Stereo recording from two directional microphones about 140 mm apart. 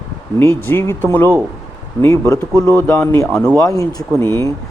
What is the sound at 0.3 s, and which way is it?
Speech, 15° left (ahead or behind).